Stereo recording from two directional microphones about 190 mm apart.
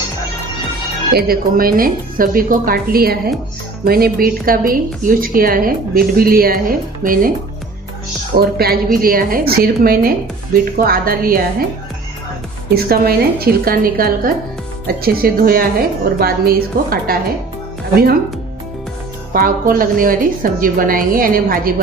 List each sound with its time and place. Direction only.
1.1 s a woman's voice: 50° right (ahead or behind)
8.4 s a woman's voice: 55° right (ahead or behind)
12.8 s a woman's voice: 55° right (ahead or behind)
19.3 s a woman's voice: 50° right (ahead or behind)